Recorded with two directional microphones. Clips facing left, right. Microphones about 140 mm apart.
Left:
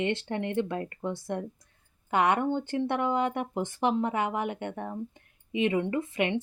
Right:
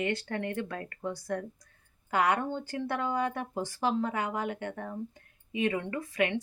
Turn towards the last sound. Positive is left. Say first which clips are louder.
# left 2 dB
turn(degrees=25)  # may be behind; listen again after turning